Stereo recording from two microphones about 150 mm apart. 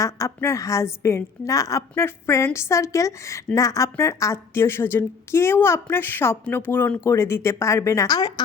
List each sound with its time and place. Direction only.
0.0 s a woman's voice: 20° left (ahead or behind)